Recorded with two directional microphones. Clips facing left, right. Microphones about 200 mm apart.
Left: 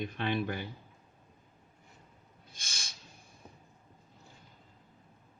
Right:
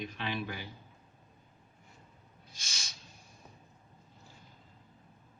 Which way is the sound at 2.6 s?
55° left (ahead or behind).